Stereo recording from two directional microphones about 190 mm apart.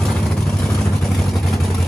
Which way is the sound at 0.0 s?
5° left (ahead or behind).